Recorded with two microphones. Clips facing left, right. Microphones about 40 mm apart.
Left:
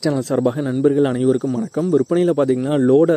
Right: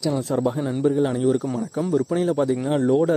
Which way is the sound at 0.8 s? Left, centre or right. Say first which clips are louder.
Left 5 dB; left.